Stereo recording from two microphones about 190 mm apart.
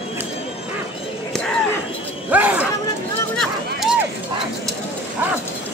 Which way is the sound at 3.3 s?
Centre (ahead or behind).